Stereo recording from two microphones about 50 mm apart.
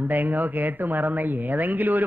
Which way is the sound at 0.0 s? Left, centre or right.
Right.